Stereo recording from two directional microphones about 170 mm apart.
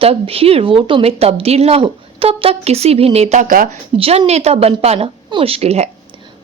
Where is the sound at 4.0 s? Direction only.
35° right (ahead or behind).